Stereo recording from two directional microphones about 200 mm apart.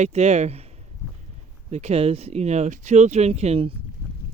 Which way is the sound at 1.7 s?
30° right (ahead or behind).